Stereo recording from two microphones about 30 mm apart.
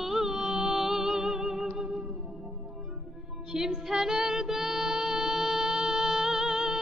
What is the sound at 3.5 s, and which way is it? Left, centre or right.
Music, centre.